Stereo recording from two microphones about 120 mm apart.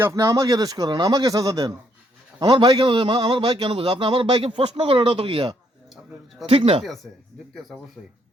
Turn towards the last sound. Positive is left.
turn(degrees=-55)  # may be behind; listen again after turning